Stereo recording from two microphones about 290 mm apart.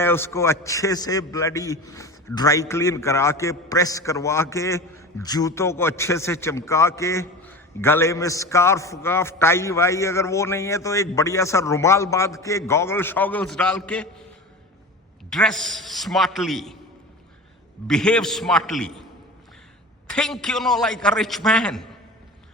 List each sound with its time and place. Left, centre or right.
0.0 s a man's voice: centre
15.3 s a man's voice: centre
17.8 s a man's voice: centre
20.1 s a man's voice: centre